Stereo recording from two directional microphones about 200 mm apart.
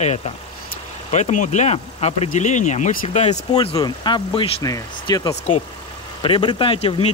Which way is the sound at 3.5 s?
20° left (ahead or behind).